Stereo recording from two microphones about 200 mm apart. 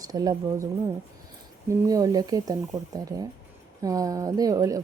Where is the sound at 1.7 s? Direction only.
15° right (ahead or behind).